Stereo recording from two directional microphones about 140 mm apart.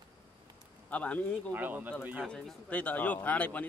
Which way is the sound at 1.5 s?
15° right (ahead or behind).